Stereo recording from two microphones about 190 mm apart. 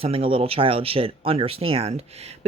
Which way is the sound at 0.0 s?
30° right (ahead or behind).